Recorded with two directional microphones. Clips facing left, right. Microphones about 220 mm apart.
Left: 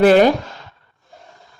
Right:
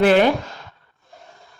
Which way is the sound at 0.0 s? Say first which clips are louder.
Left 4 dB; 40° left (ahead or behind).